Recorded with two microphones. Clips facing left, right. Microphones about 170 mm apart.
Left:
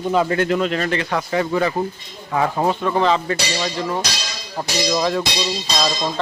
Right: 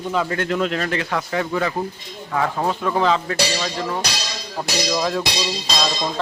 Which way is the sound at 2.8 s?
Centre (ahead or behind).